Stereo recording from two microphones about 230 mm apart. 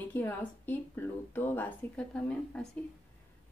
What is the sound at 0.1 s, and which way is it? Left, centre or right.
A woman's voice, centre.